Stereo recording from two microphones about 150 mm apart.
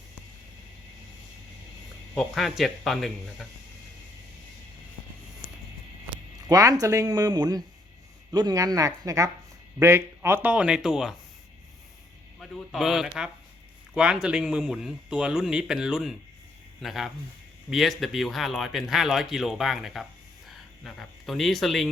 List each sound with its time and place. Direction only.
2.1 s speech: centre (ahead or behind)
6.5 s speech: 25° right (ahead or behind); by 11.1 s 5° right (ahead or behind)
12.4 s speech: centre (ahead or behind)